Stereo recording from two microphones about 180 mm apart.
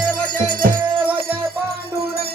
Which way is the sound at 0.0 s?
50° right (ahead or behind).